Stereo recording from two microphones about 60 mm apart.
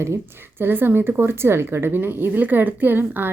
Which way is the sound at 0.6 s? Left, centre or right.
Right.